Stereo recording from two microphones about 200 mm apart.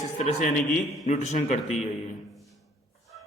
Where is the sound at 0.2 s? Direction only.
40° left (ahead or behind).